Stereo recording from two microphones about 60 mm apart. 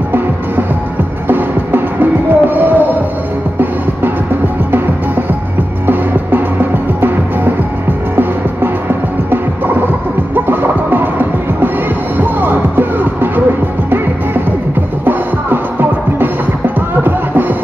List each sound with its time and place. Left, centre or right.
1.2 s music: right
5.9 s music: right
8.8 s music: right